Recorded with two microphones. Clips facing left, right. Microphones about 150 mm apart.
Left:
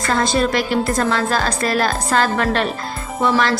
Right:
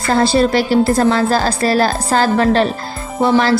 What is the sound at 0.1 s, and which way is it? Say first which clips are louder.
A woman's voice: right 5 dB; 30° right (ahead or behind).